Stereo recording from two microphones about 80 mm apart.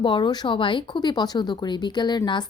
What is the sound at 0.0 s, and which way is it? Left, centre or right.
Speech, left.